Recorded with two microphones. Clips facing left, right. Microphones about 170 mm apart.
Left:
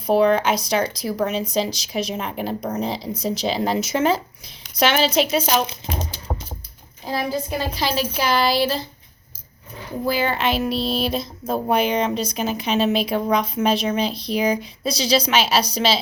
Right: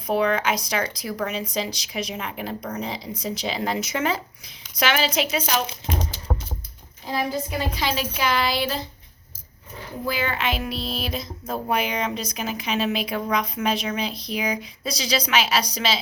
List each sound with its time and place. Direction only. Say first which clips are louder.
0.1 s a woman's voice: left 5 dB; 30° left (ahead or behind)
7.0 s a woman's voice: left 2 dB; 35° left (ahead or behind)
10.1 s speech: left 5 dB; 30° left (ahead or behind)